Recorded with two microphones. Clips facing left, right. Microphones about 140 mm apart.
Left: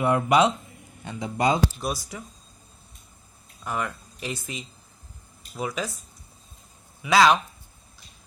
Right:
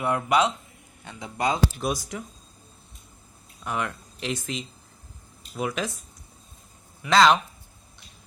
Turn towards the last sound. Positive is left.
turn(degrees=5)  # may be behind; listen again after turning